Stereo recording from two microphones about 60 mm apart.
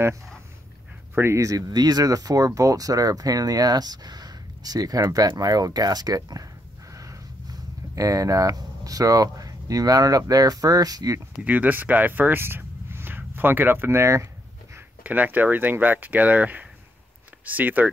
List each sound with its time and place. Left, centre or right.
1.1 s speech: right
1.4 s speech: right
6.9 s speech: right
11.4 s speech: right
15.0 s speech: right